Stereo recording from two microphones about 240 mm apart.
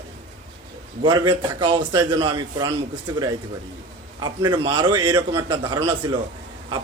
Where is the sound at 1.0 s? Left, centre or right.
Centre.